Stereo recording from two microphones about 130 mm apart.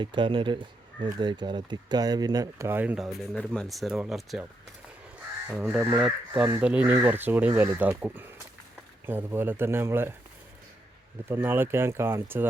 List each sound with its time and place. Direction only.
0.0 s speech: 40° right (ahead or behind); by 3.2 s 5° right (ahead or behind)
3.3 s speech: 5° left (ahead or behind)
5.5 s speech: 10° right (ahead or behind)
11.3 s speech: 15° right (ahead or behind)